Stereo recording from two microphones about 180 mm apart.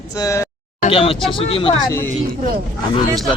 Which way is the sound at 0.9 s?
30° left (ahead or behind).